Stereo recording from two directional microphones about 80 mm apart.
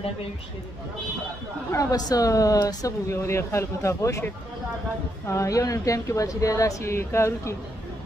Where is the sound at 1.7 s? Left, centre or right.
Left.